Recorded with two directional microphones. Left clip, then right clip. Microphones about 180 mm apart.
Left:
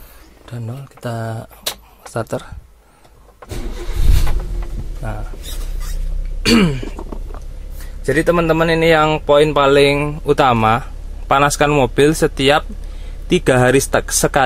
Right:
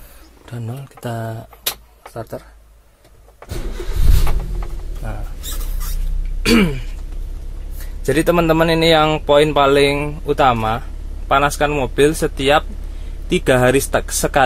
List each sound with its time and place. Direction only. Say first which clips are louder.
0.5 s speech: even; centre (ahead or behind)
6.4 s throat clearing: left 1 dB; 20° left (ahead or behind)
8.0 s a man's voice: even; centre (ahead or behind)